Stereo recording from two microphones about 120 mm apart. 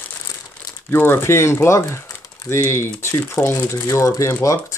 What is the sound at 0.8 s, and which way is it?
Speech, 20° left (ahead or behind).